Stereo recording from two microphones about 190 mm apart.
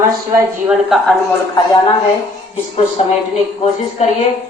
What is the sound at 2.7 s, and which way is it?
Speech, 30° left (ahead or behind).